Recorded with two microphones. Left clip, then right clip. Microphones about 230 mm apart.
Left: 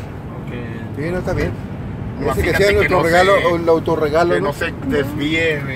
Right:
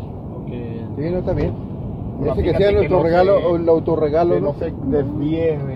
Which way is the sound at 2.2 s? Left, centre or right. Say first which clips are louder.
Left 2 dB; left.